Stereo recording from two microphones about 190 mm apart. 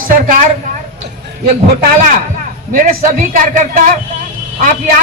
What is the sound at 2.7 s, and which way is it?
Speech, 45° right (ahead or behind).